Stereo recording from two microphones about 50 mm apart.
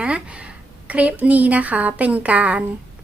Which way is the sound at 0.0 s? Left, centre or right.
Right.